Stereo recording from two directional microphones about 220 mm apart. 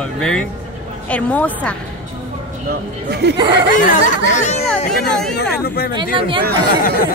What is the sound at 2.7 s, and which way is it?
Speech, 45° right (ahead or behind).